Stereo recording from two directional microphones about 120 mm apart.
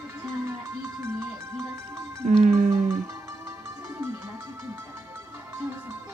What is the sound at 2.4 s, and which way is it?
Music, 90° right.